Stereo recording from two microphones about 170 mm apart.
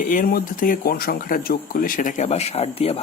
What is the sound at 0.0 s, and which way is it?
Speech, 55° left (ahead or behind).